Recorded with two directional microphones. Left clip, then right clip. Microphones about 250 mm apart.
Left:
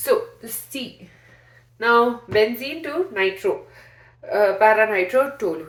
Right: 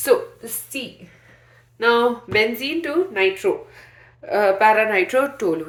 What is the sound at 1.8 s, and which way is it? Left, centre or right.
A woman's voice, right.